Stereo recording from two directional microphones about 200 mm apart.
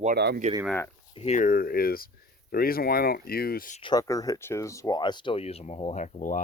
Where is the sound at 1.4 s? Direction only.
45° left (ahead or behind).